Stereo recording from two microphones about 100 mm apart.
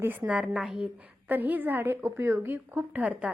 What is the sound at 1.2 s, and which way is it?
A woman's voice, 20° right (ahead or behind).